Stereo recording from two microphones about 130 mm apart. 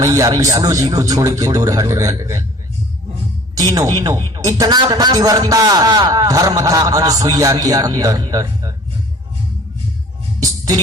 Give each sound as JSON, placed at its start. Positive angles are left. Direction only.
{"t": 0.0, "sound": "a man's voice", "side_deg": -25}
{"t": 3.5, "sound": "a man's voice", "side_deg": -30}